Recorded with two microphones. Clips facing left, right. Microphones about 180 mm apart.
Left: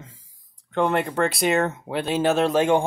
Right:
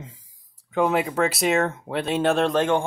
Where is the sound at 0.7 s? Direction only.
5° right (ahead or behind).